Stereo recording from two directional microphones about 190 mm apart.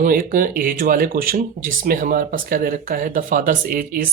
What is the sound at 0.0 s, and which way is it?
Speech, 45° right (ahead or behind).